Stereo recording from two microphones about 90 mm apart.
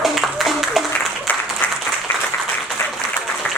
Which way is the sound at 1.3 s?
20° left (ahead or behind).